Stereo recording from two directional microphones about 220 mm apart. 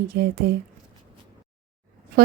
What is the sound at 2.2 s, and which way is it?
Speech, 45° right (ahead or behind).